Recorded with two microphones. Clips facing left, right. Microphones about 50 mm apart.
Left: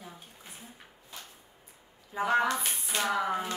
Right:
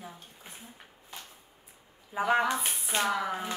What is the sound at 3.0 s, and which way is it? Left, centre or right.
Speech, centre.